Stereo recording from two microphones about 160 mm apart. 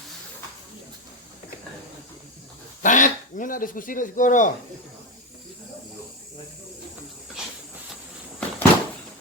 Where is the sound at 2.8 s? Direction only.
55° left (ahead or behind).